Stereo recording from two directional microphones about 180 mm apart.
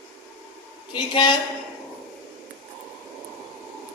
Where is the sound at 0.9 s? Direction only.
25° left (ahead or behind).